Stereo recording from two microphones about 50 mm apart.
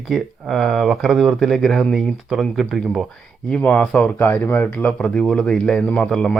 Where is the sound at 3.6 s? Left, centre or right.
Left.